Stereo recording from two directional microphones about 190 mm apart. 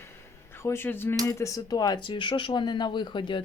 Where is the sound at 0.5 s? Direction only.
15° left (ahead or behind).